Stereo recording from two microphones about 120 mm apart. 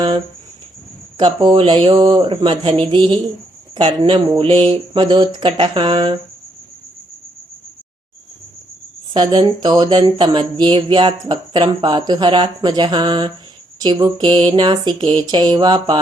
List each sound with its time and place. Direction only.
1.2 s speech: 45° right (ahead or behind)
9.1 s speech: 35° right (ahead or behind)